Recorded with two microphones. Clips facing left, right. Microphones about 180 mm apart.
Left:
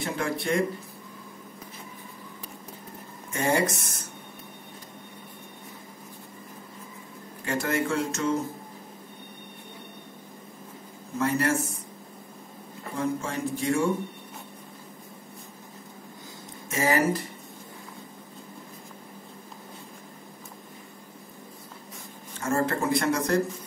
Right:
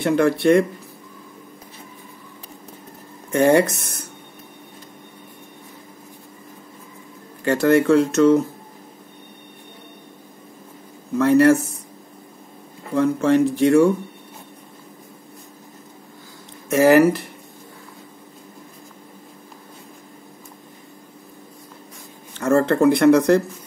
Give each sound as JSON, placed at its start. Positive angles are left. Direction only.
{"t": 0.0, "sound": "speech", "side_deg": -70}
{"t": 3.3, "sound": "speech", "side_deg": -70}
{"t": 7.4, "sound": "speech", "side_deg": -65}
{"t": 11.1, "sound": "speech", "side_deg": -65}
{"t": 12.9, "sound": "speech", "side_deg": -70}
{"t": 16.6, "sound": "speech", "side_deg": -70}
{"t": 22.4, "sound": "speech", "side_deg": -65}